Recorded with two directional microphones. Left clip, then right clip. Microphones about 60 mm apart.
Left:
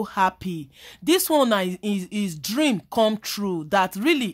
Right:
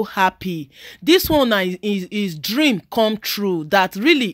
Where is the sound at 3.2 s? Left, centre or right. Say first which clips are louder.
Right 6 dB; right.